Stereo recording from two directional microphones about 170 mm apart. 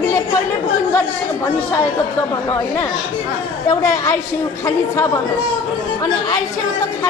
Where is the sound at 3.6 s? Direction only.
20° left (ahead or behind).